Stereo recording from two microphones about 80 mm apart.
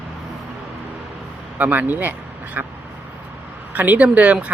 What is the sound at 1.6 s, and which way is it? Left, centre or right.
Speech, right.